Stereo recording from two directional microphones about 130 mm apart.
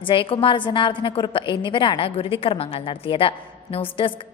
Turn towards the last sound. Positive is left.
turn(degrees=40)  # may be behind; listen again after turning